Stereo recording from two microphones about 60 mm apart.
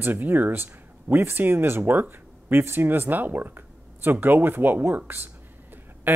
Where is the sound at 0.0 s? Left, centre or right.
Right.